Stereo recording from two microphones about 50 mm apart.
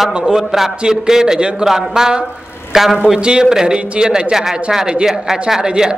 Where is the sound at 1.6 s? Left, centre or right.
Centre.